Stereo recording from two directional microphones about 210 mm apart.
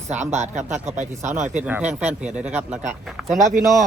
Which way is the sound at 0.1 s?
35° right (ahead or behind).